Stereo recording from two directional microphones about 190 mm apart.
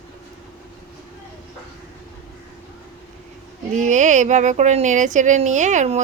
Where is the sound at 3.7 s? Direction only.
40° right (ahead or behind).